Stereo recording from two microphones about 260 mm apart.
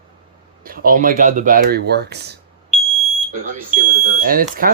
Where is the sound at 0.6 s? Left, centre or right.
Right.